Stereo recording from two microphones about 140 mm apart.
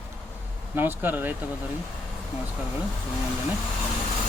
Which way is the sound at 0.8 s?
15° right (ahead or behind).